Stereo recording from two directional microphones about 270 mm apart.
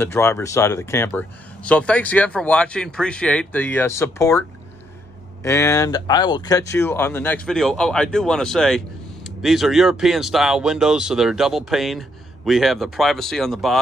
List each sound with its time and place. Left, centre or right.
0.0 s speech: centre